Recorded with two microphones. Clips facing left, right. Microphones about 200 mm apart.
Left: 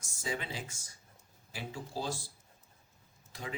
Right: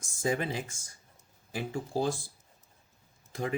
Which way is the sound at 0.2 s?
50° right (ahead or behind).